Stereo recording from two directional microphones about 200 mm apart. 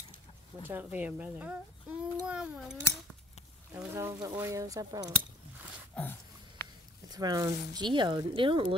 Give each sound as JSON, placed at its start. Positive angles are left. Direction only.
{"t": 0.6, "sound": "a child's voice", "side_deg": -10}
{"t": 7.1, "sound": "speech", "side_deg": -20}